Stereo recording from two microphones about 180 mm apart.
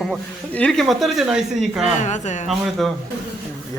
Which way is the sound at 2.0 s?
40° left (ahead or behind).